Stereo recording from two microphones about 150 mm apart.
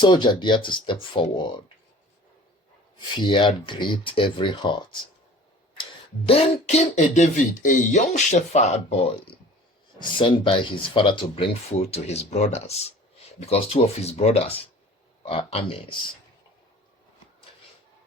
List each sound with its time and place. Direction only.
0.0 s speech: 30° left (ahead or behind)
3.0 s speech: 35° left (ahead or behind)
6.2 s speech: 40° left (ahead or behind)
11.8 s speech: 45° left (ahead or behind)